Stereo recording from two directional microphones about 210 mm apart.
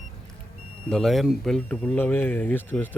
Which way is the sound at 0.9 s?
Centre (ahead or behind).